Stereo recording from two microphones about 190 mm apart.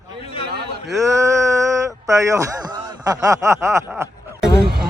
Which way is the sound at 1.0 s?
15° right (ahead or behind).